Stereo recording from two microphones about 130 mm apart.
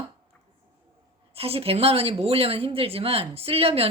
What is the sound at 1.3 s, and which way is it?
A woman's voice, 50° right (ahead or behind).